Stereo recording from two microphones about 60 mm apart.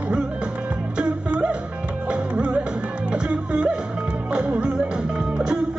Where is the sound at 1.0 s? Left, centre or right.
Centre.